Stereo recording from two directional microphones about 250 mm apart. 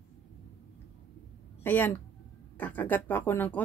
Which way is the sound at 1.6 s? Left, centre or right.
Centre.